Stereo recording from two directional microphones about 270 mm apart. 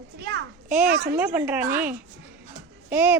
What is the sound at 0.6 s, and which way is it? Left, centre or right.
Speech, centre.